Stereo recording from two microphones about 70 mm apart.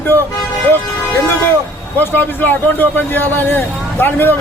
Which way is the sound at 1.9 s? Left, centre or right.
Left.